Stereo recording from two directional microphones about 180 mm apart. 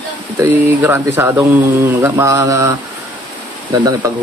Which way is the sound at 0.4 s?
10° right (ahead or behind).